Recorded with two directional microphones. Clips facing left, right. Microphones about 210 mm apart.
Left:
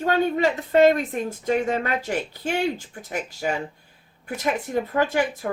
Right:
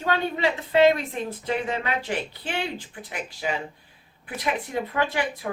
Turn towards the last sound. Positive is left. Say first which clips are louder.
# left 4 dB
turn(degrees=45)  # may be behind; listen again after turning